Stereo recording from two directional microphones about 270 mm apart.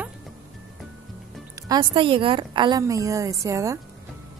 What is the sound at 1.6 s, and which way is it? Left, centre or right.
A woman's voice, centre.